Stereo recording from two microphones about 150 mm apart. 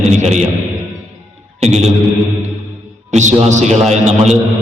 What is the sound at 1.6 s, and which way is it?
Speech, 45° right (ahead or behind).